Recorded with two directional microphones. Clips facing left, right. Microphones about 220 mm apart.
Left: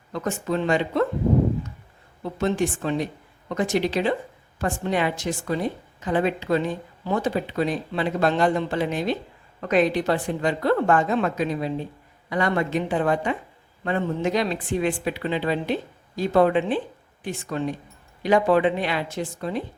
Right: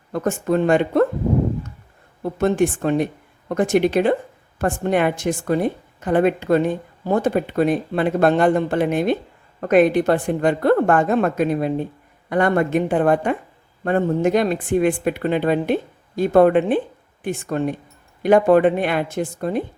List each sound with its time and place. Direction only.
0.1 s a woman's voice: 50° right (ahead or behind)
2.2 s a woman's voice: 55° right (ahead or behind)